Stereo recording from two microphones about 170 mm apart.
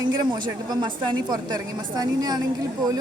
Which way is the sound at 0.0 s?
25° right (ahead or behind).